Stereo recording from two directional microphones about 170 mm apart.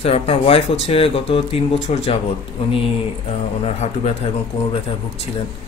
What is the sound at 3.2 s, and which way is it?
Speech, 40° left (ahead or behind).